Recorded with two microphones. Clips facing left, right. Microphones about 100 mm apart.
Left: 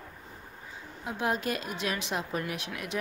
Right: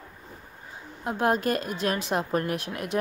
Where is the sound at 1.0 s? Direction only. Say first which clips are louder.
Right 6 dB; 50° right (ahead or behind).